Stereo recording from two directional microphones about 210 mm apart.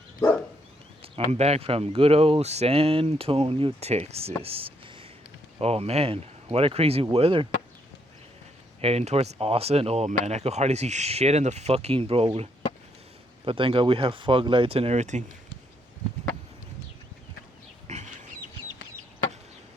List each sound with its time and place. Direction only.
1.0 s speech: 30° right (ahead or behind)
8.8 s speech: 30° right (ahead or behind)
17.8 s a sound: 35° right (ahead or behind)